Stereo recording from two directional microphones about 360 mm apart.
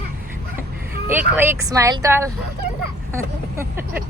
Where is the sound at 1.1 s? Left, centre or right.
Centre.